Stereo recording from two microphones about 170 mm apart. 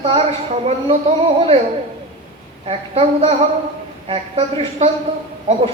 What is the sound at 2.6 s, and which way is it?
A woman's voice, 40° right (ahead or behind).